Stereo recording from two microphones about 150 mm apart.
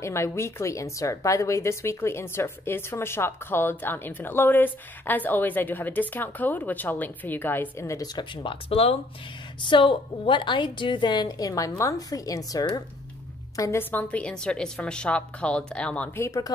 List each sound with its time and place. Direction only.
0.0 s a woman's voice: 20° left (ahead or behind)
8.2 s a woman's voice: 35° left (ahead or behind); by 16.1 s 5° left (ahead or behind)
16.2 s a woman's voice: 20° left (ahead or behind)